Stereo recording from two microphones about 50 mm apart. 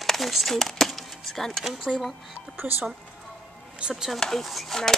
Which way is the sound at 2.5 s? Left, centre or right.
Right.